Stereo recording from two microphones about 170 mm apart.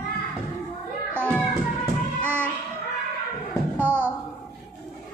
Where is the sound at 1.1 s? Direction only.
10° left (ahead or behind).